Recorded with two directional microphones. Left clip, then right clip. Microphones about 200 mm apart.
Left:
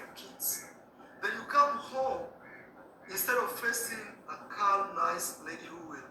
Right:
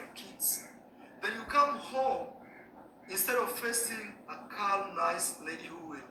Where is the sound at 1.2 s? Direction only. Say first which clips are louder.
Left 1 dB; 25° right (ahead or behind).